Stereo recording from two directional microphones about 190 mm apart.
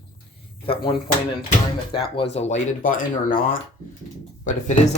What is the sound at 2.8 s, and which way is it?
Speech, 45° left (ahead or behind).